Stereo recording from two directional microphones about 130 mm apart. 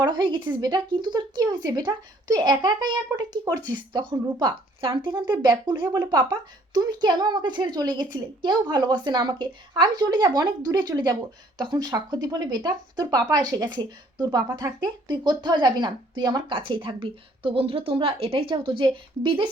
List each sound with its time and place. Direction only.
0.0 s speech: 35° right (ahead or behind)